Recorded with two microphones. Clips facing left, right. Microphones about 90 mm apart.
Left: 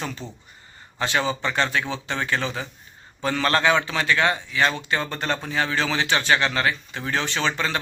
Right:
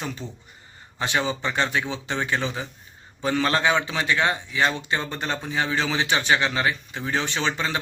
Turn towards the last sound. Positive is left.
turn(degrees=-15)  # may be behind; listen again after turning